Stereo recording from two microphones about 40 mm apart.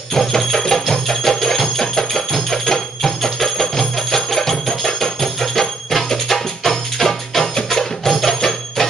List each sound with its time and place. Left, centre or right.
0.1 s music: centre